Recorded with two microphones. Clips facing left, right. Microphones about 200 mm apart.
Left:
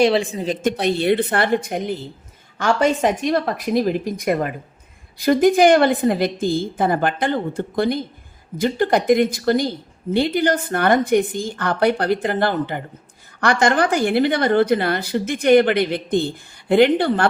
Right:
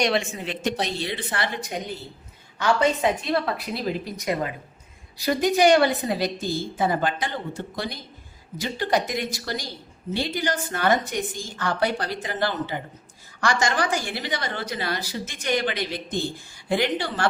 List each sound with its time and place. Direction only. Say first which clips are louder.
0.0 s speech: left 7 dB; 30° left (ahead or behind)
0.8 s a woman's voice: left 11 dB; 60° left (ahead or behind)